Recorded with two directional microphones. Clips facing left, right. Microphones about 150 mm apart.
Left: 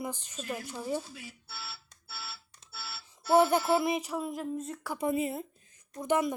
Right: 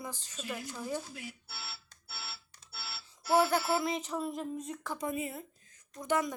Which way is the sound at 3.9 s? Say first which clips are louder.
Left 2 dB; 10° left (ahead or behind).